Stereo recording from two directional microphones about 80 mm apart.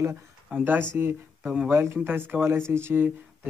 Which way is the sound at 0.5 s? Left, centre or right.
Centre.